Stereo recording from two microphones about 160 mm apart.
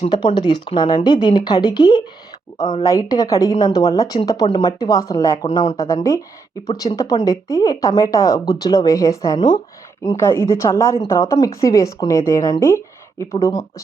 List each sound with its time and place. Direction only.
0.3 s speech: 25° left (ahead or behind)